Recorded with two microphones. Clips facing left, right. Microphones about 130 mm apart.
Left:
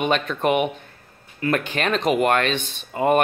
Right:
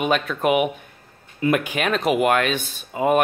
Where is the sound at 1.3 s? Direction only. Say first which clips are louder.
Right 2 dB; 20° right (ahead or behind).